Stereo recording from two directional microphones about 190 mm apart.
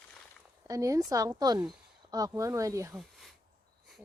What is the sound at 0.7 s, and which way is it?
A woman's voice, 15° right (ahead or behind).